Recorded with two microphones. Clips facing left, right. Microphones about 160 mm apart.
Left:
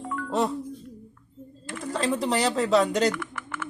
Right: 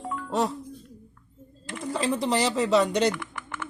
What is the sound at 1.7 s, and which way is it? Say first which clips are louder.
Speech: even; centre (ahead or behind).